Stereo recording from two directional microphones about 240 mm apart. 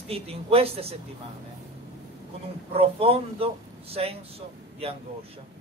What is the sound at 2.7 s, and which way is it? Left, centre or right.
A man's voice, right.